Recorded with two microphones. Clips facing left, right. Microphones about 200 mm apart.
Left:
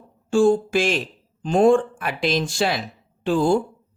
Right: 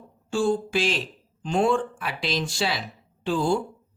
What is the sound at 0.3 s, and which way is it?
Speech, 50° left (ahead or behind).